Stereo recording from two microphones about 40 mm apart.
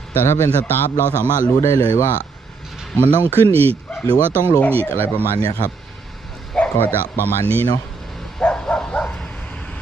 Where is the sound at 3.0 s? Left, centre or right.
Right.